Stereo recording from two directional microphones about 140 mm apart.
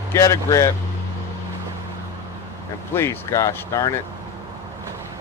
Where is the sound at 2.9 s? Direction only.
15° left (ahead or behind).